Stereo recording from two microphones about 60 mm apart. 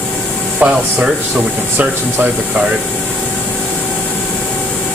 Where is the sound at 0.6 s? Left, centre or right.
Right.